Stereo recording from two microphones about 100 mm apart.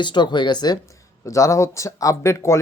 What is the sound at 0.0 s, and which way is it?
Speech, 50° left (ahead or behind).